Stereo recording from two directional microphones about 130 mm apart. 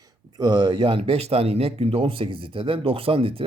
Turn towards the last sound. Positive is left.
turn(degrees=-45)  # may be behind; listen again after turning